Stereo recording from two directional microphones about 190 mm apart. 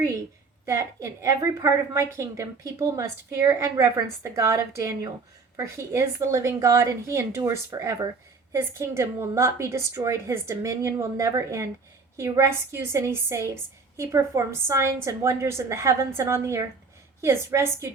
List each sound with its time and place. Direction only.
0.6 s a woman's voice: 15° right (ahead or behind)